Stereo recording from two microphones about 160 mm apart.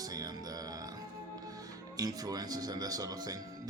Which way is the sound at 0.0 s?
25° right (ahead or behind).